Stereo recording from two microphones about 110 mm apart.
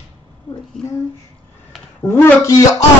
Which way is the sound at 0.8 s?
5° left (ahead or behind).